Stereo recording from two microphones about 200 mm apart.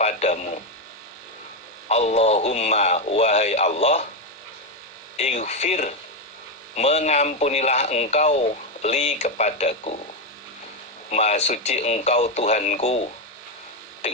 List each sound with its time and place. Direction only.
0.0 s radio: 35° left (ahead or behind)
1.9 s speech: 30° left (ahead or behind)
5.1 s speech: 35° left (ahead or behind)
11.1 s speech: 35° left (ahead or behind)